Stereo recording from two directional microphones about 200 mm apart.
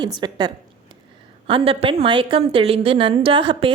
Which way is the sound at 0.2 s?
20° right (ahead or behind).